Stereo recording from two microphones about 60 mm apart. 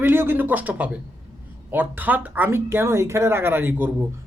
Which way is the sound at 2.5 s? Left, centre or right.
Right.